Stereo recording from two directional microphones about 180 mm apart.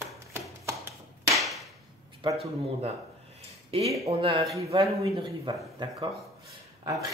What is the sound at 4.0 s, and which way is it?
A man's voice, 35° right (ahead or behind).